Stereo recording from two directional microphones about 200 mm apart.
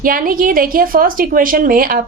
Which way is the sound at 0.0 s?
45° right (ahead or behind).